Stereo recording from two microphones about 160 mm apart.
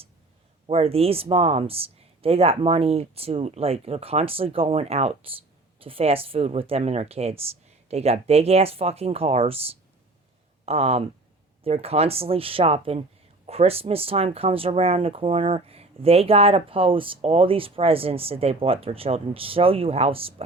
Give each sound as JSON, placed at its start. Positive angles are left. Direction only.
{"t": 0.7, "sound": "speech", "side_deg": -35}